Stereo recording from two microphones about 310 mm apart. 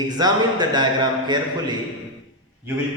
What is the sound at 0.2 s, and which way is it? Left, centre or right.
A man's voice, centre.